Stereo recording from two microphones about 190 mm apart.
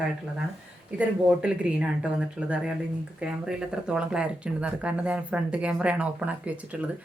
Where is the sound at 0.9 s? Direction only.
5° right (ahead or behind).